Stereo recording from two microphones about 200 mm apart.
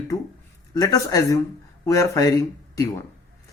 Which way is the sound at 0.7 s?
20° left (ahead or behind).